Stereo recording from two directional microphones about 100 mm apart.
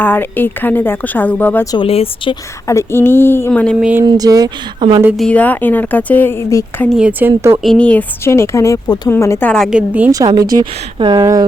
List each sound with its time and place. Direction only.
0.0 s a woman's voice: 20° left (ahead or behind)
1.8 s speech: 70° left (ahead or behind)
2.6 s a woman's voice: 25° left (ahead or behind)
3.5 s a woman's voice: 10° left (ahead or behind)
4.0 s speech: 45° right (ahead or behind)
5.3 s a woman's voice: 15° left (ahead or behind)
7.0 s speech: 20° right (ahead or behind)
7.6 s a woman's voice: 10° left (ahead or behind)
8.2 s a woman's voice: 25° left (ahead or behind)
9.4 s a woman's voice: 10° left (ahead or behind)
9.6 s a woman's voice: 10° right (ahead or behind)
10.1 s speech: 35° right (ahead or behind)
10.6 s speech: 50° right (ahead or behind)